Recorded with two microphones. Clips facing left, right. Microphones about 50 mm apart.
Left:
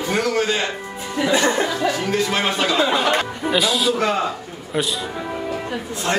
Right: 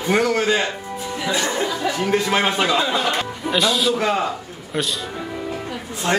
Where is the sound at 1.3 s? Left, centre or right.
Left.